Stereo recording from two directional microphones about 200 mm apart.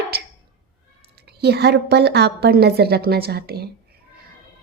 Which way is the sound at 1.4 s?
55° right (ahead or behind).